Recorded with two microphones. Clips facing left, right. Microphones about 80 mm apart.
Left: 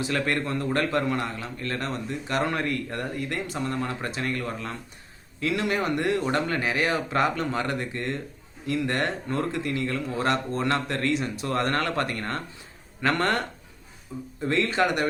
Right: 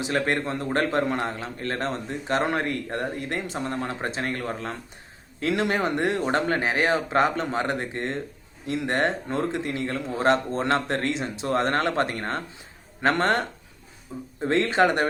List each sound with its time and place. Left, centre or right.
0.0 s a man's voice: right